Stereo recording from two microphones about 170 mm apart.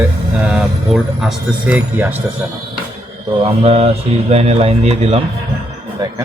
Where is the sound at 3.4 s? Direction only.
35° right (ahead or behind).